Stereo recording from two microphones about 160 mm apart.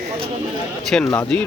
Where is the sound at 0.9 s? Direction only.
5° left (ahead or behind).